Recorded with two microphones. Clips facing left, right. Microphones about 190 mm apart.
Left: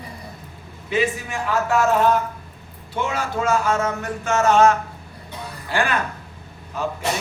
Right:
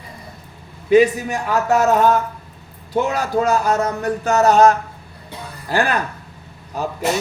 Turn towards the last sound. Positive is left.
turn(degrees=-40)  # may be behind; listen again after turning